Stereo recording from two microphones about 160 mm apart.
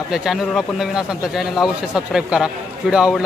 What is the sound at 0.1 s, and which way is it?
A man's voice, centre (ahead or behind).